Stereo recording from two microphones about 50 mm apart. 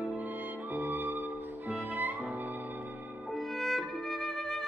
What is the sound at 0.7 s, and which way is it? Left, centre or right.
Music, right.